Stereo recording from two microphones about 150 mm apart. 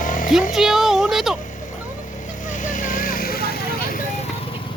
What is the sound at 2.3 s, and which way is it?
Vehicle, 60° left (ahead or behind).